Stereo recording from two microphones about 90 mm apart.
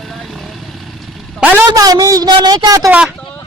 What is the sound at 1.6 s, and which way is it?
A man's voice, 45° right (ahead or behind).